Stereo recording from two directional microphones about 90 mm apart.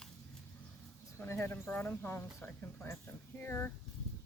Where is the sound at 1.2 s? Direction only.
25° left (ahead or behind).